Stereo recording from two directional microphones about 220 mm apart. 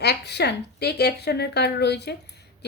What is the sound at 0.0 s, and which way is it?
A woman's voice, 50° left (ahead or behind).